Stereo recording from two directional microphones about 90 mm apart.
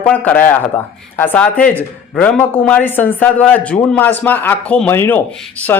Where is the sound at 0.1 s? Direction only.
20° left (ahead or behind).